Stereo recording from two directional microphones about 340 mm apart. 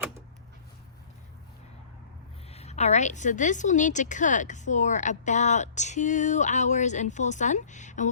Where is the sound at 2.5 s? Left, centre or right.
Centre.